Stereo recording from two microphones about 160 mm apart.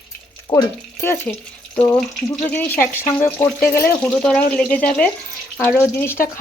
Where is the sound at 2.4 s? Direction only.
10° left (ahead or behind).